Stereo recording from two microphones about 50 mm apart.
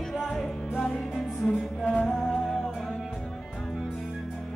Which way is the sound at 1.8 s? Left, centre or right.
Centre.